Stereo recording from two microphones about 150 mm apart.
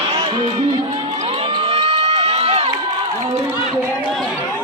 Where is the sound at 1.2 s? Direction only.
40° right (ahead or behind).